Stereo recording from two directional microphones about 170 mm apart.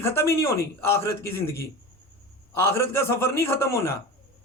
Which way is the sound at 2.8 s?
15° left (ahead or behind).